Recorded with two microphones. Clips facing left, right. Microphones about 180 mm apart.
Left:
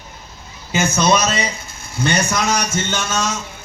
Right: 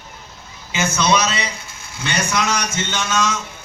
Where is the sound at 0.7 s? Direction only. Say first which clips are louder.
Left 2 dB; 45° left (ahead or behind).